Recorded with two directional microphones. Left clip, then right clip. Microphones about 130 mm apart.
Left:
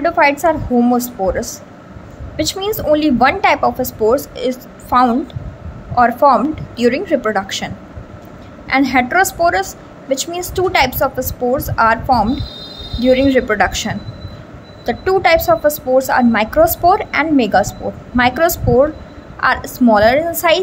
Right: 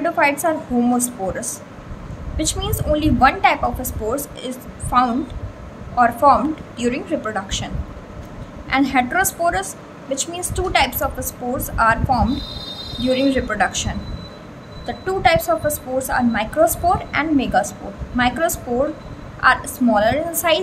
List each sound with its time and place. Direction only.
0.0 s a woman's voice: 40° left (ahead or behind)